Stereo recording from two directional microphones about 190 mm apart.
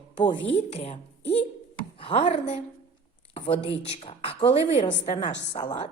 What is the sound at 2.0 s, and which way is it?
A woman's voice, 30° left (ahead or behind).